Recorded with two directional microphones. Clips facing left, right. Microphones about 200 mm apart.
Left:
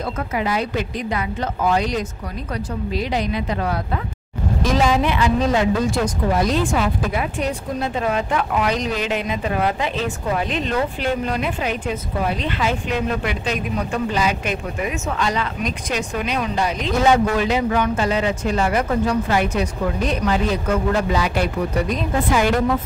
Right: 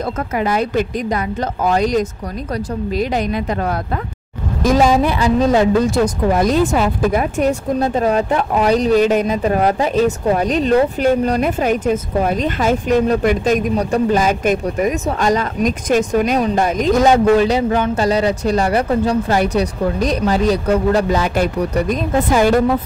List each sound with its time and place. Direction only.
0.4 s a woman's voice: 50° right (ahead or behind)
6.3 s speech: 50° right (ahead or behind)